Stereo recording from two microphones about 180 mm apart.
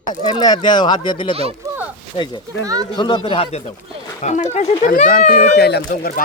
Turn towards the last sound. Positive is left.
turn(degrees=50)  # may be behind; listen again after turning